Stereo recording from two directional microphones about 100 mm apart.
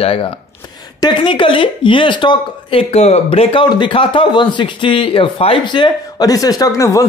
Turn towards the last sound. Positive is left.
turn(degrees=35)  # may be behind; listen again after turning